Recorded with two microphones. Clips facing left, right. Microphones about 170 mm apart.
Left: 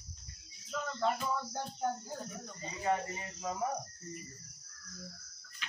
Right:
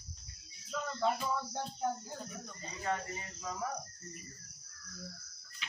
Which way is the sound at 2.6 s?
15° left (ahead or behind).